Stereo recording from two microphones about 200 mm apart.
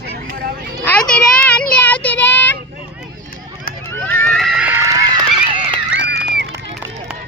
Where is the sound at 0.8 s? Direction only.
5° left (ahead or behind).